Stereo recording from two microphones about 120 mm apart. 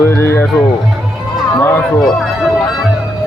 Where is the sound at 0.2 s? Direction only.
20° left (ahead or behind).